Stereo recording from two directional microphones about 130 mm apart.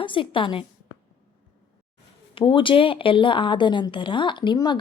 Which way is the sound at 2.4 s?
40° left (ahead or behind).